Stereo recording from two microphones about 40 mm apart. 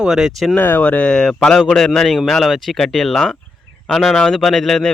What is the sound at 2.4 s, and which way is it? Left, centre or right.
A man's voice, centre.